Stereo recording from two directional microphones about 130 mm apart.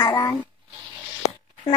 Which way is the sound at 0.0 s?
25° left (ahead or behind).